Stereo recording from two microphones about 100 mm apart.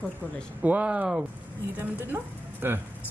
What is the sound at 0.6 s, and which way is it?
A man's voice, 15° right (ahead or behind).